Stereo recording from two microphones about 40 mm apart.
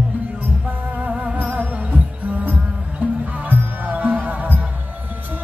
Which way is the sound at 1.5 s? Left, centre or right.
Right.